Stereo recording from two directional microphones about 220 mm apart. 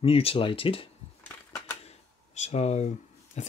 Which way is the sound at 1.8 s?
30° left (ahead or behind).